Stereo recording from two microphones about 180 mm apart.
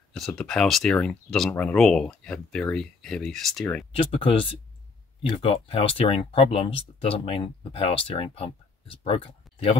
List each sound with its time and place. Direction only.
0.1 s speech: 5° left (ahead or behind)
3.9 s speech: 30° left (ahead or behind)